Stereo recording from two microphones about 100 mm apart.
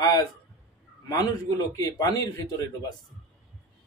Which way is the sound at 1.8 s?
40° left (ahead or behind).